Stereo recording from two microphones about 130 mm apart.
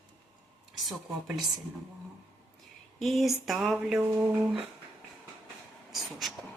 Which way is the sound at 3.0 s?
Centre (ahead or behind).